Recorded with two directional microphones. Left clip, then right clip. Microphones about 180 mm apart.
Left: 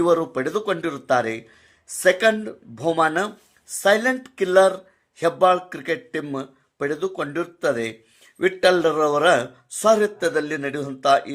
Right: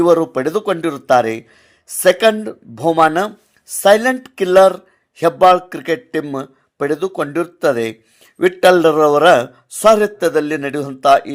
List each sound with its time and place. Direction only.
0.0 s speech: 30° right (ahead or behind)